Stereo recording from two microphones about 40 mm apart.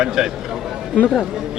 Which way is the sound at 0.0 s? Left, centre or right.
Centre.